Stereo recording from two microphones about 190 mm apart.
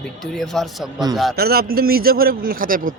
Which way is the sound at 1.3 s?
55° right (ahead or behind).